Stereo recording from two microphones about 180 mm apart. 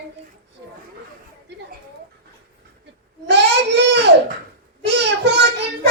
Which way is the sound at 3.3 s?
70° right (ahead or behind).